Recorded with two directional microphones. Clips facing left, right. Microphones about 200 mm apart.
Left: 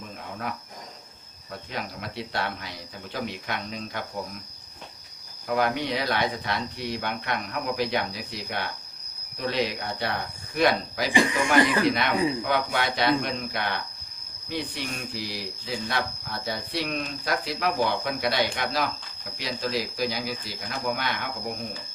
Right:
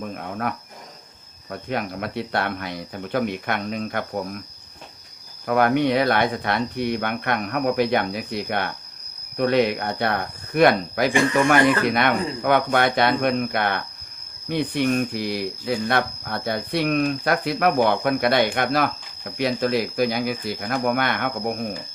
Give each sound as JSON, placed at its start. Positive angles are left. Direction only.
{"t": 0.2, "sound": "cricket", "side_deg": -60}
{"t": 1.5, "sound": "speech", "side_deg": -55}
{"t": 5.5, "sound": "speech", "side_deg": -55}